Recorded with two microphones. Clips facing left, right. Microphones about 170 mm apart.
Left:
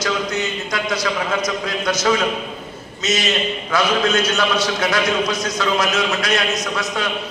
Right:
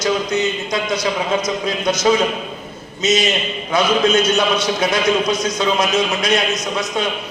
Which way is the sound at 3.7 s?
20° right (ahead or behind).